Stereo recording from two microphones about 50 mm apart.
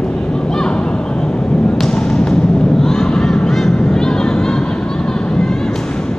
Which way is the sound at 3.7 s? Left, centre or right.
Centre.